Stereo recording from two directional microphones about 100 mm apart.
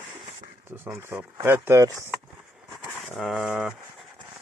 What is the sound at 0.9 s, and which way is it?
Speech, 25° right (ahead or behind).